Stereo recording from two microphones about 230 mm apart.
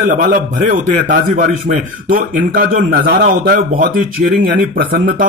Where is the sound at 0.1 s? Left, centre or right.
Right.